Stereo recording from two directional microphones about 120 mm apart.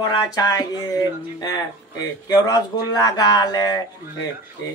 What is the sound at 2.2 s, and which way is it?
A man's voice, 30° left (ahead or behind).